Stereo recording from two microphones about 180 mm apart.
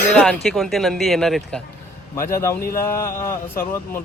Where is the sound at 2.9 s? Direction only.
15° left (ahead or behind).